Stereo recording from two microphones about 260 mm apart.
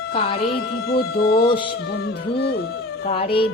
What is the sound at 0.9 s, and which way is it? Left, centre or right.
Speech, left.